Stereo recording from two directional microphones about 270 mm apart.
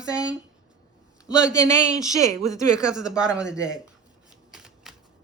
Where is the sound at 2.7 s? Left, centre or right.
Centre.